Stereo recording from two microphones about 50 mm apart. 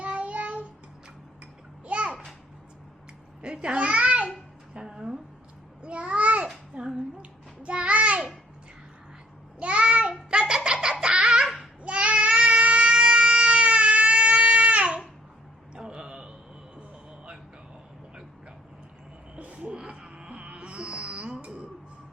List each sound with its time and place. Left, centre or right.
0.0 s a sound: right
1.9 s a sound: right
3.4 s babbling: centre
4.7 s music: centre
5.8 s babbling: right
6.7 s child singing: centre
9.6 s child singing: right
10.5 s a sound: centre
11.0 s baby laughter: centre
11.8 s child singing: right
15.7 s a sound: centre
19.4 s music: right